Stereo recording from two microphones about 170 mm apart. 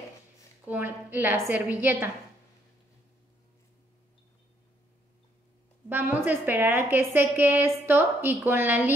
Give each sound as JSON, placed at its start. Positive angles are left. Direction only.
{"t": 0.7, "sound": "a woman's voice", "side_deg": -10}
{"t": 5.9, "sound": "a woman's voice", "side_deg": -10}